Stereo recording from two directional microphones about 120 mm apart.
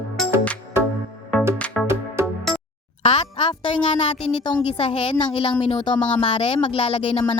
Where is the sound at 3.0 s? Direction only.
70° left (ahead or behind).